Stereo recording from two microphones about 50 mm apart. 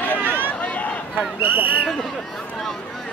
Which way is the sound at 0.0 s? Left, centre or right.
Left.